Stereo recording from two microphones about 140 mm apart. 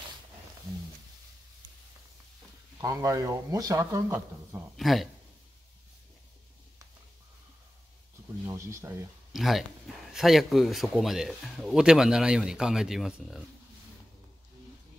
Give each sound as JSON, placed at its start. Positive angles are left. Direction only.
{"t": 2.8, "sound": "speech", "side_deg": -25}
{"t": 4.7, "sound": "speech", "side_deg": 0}
{"t": 8.5, "sound": "speech", "side_deg": -20}
{"t": 9.3, "sound": "speech", "side_deg": 0}